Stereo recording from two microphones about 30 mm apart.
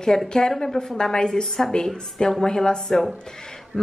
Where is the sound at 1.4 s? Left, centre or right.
Centre.